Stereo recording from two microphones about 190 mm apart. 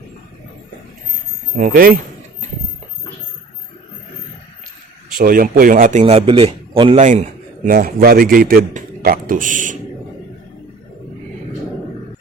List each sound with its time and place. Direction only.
1.5 s a man's voice: 45° right (ahead or behind)
5.1 s a man's voice: 50° right (ahead or behind)